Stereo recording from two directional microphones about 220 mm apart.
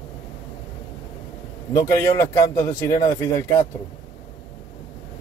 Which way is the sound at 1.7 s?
15° left (ahead or behind).